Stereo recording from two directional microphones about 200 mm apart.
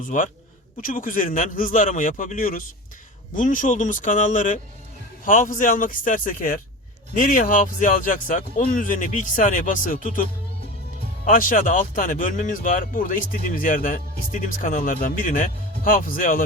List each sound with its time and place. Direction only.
0.0 s speech: 40° left (ahead or behind)
11.3 s speech: 40° left (ahead or behind)